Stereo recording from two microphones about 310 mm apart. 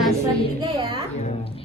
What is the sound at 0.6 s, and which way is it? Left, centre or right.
Speech, centre.